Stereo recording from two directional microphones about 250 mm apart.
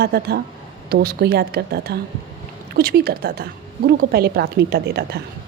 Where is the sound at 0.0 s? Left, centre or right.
Right.